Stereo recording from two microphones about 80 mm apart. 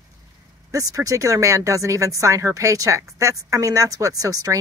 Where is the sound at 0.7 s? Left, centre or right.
Right.